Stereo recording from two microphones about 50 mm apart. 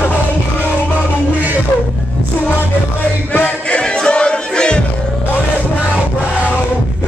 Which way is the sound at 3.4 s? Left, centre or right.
Left.